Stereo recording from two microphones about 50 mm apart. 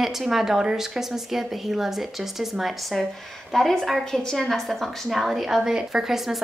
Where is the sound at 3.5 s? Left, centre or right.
Centre.